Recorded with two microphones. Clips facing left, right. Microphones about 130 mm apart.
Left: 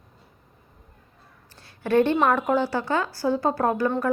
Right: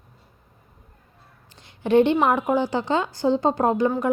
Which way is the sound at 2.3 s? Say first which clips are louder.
Right 1 dB; 15° right (ahead or behind).